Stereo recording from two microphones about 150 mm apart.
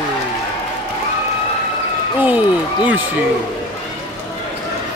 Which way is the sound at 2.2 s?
10° right (ahead or behind).